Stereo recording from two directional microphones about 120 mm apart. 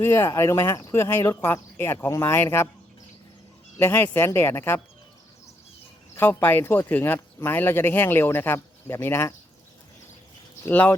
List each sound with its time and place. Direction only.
0.0 s speech: 25° left (ahead or behind)
3.8 s speech: 20° left (ahead or behind)
6.1 s speech: 15° left (ahead or behind)
10.6 s speech: 15° left (ahead or behind)